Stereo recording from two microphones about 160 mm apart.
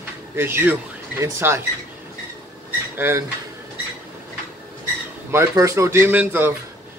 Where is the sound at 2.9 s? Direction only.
15° right (ahead or behind).